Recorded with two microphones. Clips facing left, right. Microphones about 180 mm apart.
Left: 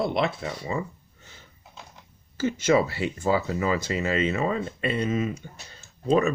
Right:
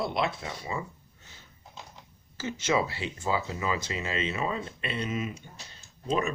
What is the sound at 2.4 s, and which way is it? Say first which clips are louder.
Speech: left 6 dB; 55° left (ahead or behind).